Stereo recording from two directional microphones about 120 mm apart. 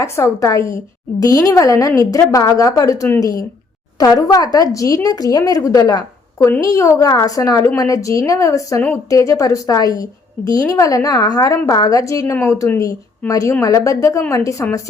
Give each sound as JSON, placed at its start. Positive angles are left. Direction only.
{"t": 0.3, "sound": "a woman's voice", "side_deg": 25}